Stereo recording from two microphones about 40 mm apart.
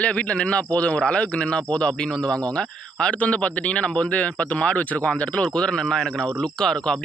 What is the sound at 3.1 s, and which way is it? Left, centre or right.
Speech, left.